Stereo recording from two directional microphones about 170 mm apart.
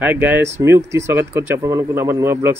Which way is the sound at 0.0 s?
10° right (ahead or behind).